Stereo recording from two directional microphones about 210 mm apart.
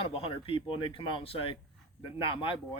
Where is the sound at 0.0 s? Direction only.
25° left (ahead or behind).